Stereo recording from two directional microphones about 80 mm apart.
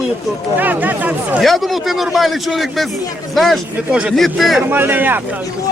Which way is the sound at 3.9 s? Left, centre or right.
Centre.